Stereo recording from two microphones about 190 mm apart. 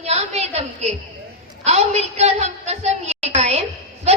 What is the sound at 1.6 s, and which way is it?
A man's voice, 35° right (ahead or behind).